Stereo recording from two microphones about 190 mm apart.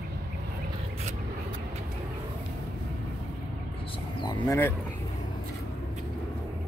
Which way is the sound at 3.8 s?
25° left (ahead or behind).